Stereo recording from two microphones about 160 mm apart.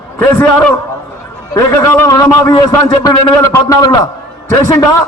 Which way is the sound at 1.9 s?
20° left (ahead or behind).